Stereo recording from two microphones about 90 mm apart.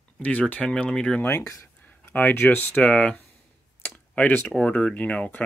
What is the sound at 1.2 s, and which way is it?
Speech, 30° left (ahead or behind).